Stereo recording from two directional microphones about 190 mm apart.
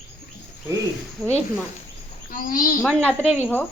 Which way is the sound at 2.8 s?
5° left (ahead or behind).